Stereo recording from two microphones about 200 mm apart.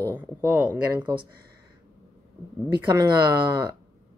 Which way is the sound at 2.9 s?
20° right (ahead or behind).